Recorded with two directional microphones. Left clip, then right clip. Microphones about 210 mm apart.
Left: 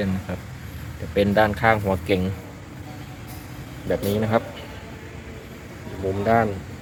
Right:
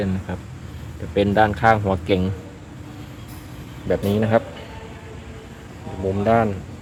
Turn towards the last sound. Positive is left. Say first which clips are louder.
# right 2 dB
turn(degrees=-30)  # may be behind; listen again after turning